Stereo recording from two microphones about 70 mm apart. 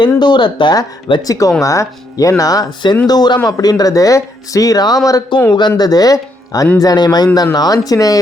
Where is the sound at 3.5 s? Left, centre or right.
Left.